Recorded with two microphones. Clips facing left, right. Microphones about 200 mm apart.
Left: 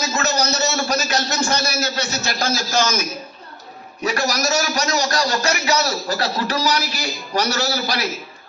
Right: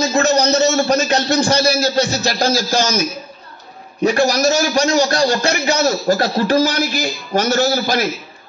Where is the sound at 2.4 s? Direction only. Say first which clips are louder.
Right 3 dB; 55° right (ahead or behind).